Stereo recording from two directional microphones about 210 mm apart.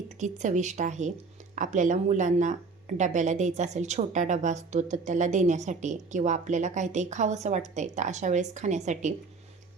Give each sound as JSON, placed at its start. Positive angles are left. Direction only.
{"t": 0.2, "sound": "a woman's voice", "side_deg": -35}